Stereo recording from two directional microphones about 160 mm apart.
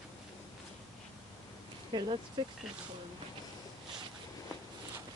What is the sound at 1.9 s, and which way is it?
Speech, 30° right (ahead or behind).